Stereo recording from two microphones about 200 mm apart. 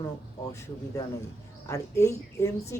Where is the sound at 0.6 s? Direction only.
15° left (ahead or behind).